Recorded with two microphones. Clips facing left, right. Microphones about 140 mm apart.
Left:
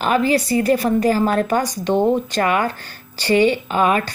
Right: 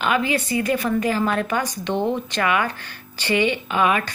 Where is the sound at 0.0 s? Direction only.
35° left (ahead or behind).